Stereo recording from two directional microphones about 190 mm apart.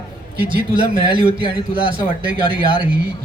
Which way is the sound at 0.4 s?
25° right (ahead or behind).